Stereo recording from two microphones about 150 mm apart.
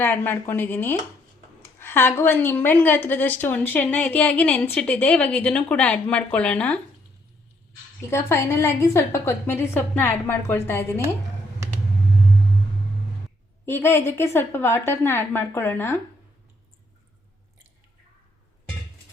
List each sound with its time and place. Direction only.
0.0 s a woman's voice: 15° left (ahead or behind)
8.1 s a woman's voice: 15° left (ahead or behind)
13.7 s a woman's voice: 15° left (ahead or behind)